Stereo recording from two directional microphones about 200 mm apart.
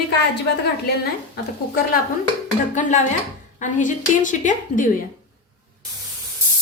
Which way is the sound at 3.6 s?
40° left (ahead or behind).